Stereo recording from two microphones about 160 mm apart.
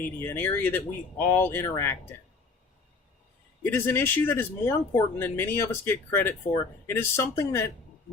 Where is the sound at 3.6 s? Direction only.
15° left (ahead or behind).